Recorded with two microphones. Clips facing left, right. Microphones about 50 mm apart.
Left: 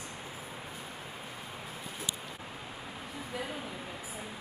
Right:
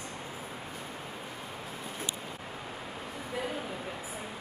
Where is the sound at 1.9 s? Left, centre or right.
Right.